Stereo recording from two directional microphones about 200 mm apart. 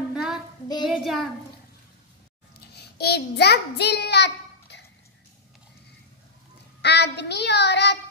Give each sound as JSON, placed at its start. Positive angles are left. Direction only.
{"t": 0.1, "sound": "child singing", "side_deg": -5}
{"t": 2.7, "sound": "a child's voice", "side_deg": 55}
{"t": 6.8, "sound": "child singing", "side_deg": 60}